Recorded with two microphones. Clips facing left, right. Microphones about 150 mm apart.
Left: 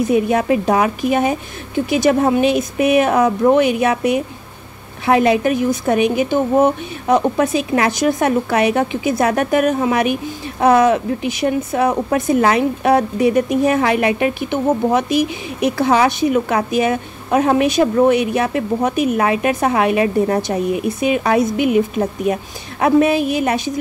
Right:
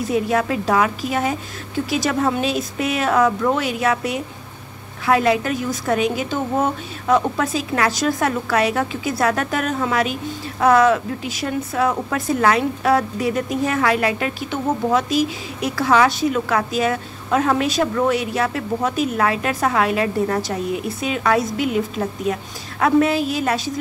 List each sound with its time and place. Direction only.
0.0 s speech: 20° left (ahead or behind)